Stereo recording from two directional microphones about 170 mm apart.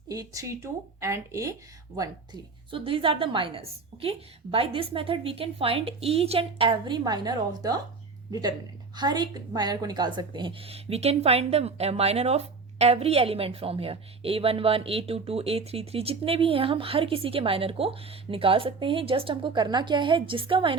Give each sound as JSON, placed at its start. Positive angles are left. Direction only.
{"t": 0.1, "sound": "speech", "side_deg": -20}